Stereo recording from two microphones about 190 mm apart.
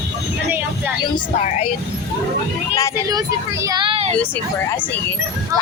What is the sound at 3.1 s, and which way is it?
A child's voice, 20° right (ahead or behind).